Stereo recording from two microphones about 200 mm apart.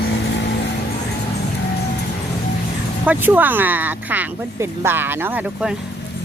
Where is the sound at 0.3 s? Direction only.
60° left (ahead or behind).